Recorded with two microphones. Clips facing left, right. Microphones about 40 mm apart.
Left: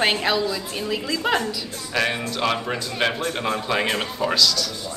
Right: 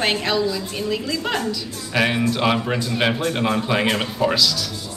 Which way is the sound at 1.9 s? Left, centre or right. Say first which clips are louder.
Right 4 dB; centre.